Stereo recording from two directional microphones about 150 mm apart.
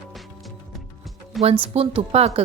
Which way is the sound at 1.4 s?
40° right (ahead or behind).